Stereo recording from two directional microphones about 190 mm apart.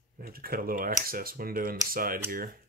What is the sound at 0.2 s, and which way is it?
Speech, 50° right (ahead or behind).